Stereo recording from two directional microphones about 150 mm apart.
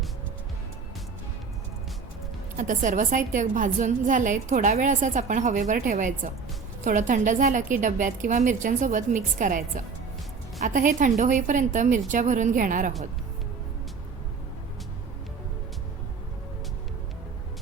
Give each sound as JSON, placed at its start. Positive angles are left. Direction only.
{"t": 2.6, "sound": "a woman's voice", "side_deg": -55}